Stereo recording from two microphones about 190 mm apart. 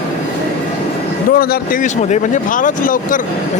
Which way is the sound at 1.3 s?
45° left (ahead or behind).